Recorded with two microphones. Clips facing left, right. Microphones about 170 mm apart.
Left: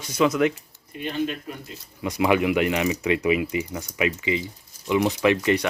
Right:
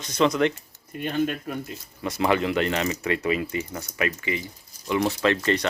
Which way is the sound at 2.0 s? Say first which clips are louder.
Left 2 dB; 15° left (ahead or behind).